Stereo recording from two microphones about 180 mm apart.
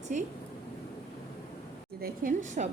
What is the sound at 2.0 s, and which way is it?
Speech, 45° right (ahead or behind).